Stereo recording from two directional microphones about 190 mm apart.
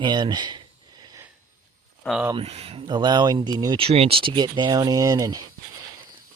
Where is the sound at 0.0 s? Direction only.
25° right (ahead or behind).